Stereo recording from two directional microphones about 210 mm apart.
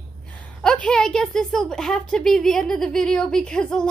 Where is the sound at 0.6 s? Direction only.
5° left (ahead or behind).